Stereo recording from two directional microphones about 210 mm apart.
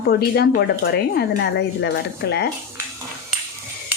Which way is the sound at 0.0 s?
50° left (ahead or behind).